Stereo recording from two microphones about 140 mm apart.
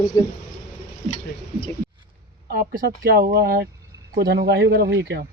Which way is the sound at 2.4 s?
90° right.